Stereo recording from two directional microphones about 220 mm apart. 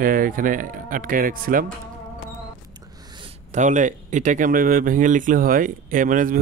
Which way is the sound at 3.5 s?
35° right (ahead or behind).